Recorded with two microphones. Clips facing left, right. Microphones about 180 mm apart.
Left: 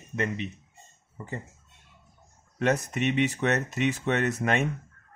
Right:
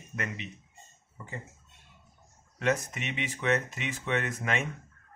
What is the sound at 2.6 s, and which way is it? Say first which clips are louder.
Speech: left 4 dB; 40° left (ahead or behind).